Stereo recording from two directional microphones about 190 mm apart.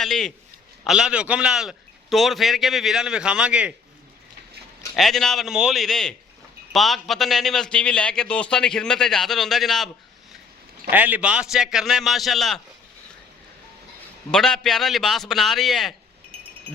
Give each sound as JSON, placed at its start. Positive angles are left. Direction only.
{"t": 0.0, "sound": "a man's voice", "side_deg": 0}
{"t": 4.9, "sound": "a man's voice", "side_deg": 0}
{"t": 10.9, "sound": "a man's voice", "side_deg": -10}
{"t": 14.3, "sound": "a man's voice", "side_deg": 5}
{"t": 16.3, "sound": "a sound", "side_deg": -30}